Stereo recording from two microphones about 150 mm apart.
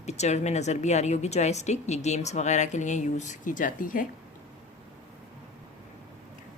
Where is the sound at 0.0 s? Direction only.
50° left (ahead or behind); by 4.0 s 65° left (ahead or behind).